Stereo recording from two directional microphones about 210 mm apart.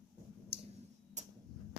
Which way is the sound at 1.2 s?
35° right (ahead or behind).